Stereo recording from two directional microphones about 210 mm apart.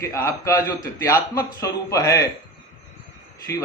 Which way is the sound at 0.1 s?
15° left (ahead or behind).